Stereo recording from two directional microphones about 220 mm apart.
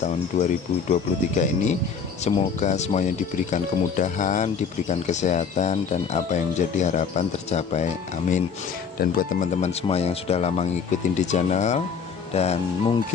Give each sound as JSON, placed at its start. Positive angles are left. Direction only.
{"t": 0.0, "sound": "speech", "side_deg": 35}